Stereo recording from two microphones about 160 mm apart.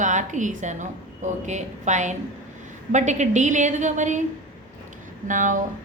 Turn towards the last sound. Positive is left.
turn(degrees=-55)  # may be behind; listen again after turning